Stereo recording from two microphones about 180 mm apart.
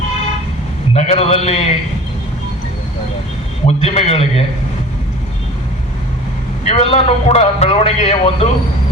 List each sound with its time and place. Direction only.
0.9 s a man's voice: 35° left (ahead or behind)
3.7 s a man's voice: 35° left (ahead or behind)
6.7 s a man's voice: 35° left (ahead or behind)